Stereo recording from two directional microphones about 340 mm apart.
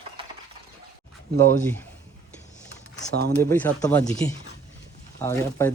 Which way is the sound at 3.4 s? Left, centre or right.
Centre.